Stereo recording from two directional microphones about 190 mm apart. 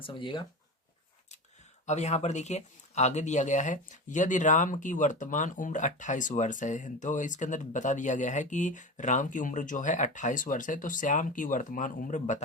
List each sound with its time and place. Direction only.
0.0 s speech: 25° left (ahead or behind)
1.9 s speech: 35° left (ahead or behind)